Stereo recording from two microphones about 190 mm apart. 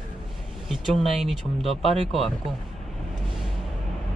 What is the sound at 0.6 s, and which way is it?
Speech, centre (ahead or behind).